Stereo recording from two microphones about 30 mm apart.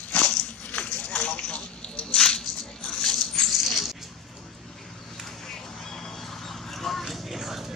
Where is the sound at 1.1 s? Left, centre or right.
Left.